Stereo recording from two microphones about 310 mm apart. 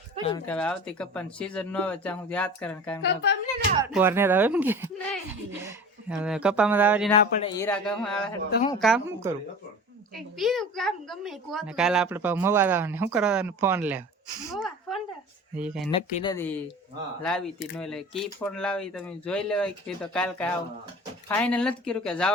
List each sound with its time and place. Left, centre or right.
0.3 s a woman's voice: centre
3.0 s a woman's voice: left
3.8 s a woman's voice: centre
7.1 s a woman's voice: centre
15.9 s a woman's voice: centre